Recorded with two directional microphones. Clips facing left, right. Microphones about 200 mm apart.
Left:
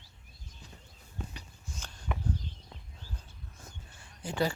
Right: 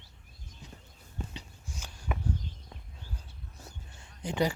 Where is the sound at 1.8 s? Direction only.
10° right (ahead or behind).